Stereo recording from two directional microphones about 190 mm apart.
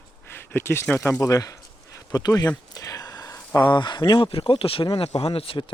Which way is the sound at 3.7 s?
25° left (ahead or behind).